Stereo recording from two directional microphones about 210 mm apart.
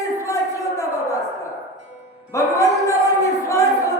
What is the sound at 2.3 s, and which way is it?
Crowd, 15° left (ahead or behind).